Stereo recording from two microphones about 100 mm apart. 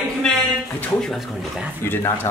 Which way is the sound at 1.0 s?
Centre (ahead or behind).